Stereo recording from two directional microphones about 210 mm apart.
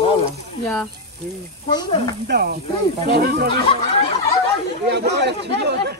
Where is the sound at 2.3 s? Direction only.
50° right (ahead or behind).